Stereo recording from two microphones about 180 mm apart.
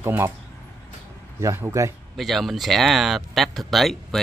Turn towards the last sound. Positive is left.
turn(degrees=0)  # may be behind; listen again after turning